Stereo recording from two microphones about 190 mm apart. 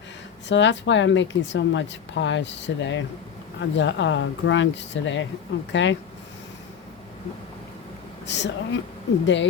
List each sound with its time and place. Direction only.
0.4 s a woman's voice: 70° left (ahead or behind)
8.3 s a woman's voice: 70° left (ahead or behind)